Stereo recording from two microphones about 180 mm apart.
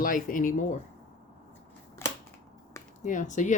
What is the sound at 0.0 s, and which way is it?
Speech, 50° left (ahead or behind).